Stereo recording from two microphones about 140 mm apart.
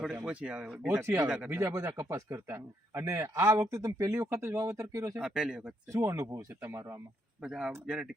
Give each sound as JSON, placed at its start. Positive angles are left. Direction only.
{"t": 0.3, "sound": "speech", "side_deg": -10}
{"t": 0.9, "sound": "a man's voice", "side_deg": -20}
{"t": 1.3, "sound": "speech", "side_deg": -5}
{"t": 1.5, "sound": "a man's voice", "side_deg": -20}
{"t": 5.1, "sound": "speech", "side_deg": -5}
{"t": 5.9, "sound": "a man's voice", "side_deg": -20}
{"t": 7.4, "sound": "speech", "side_deg": -5}